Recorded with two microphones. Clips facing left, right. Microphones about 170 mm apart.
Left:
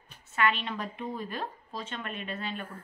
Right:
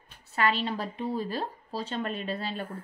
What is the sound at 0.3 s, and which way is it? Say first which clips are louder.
A woman's voice: right 2 dB; 35° right (ahead or behind).